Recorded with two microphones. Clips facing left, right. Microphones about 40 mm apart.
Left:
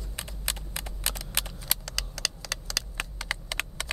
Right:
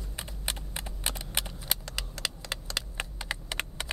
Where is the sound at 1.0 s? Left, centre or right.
Centre.